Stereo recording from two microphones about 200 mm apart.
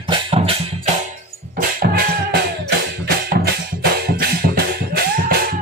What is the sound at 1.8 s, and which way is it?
Music, 55° right (ahead or behind).